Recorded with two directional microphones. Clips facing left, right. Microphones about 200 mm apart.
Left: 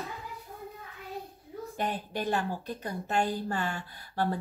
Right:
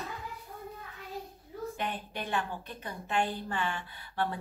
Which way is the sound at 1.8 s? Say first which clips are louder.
Left 8 dB; 40° left (ahead or behind).